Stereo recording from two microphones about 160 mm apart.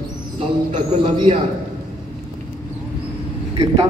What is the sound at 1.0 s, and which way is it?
Speech, 30° right (ahead or behind).